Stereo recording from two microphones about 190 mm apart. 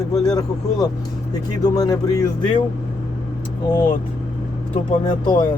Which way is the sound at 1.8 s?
20° left (ahead or behind).